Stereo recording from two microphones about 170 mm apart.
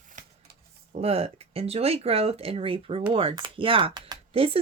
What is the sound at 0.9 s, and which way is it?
Speech, 35° right (ahead or behind).